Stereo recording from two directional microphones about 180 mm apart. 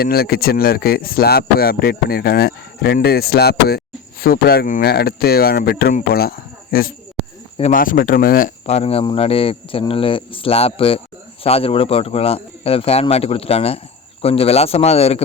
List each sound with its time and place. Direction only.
0.0 s speech: 55° left (ahead or behind)
8.6 s speech: 35° left (ahead or behind)